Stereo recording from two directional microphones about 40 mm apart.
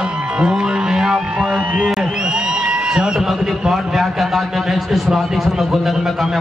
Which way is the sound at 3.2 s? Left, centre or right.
Centre.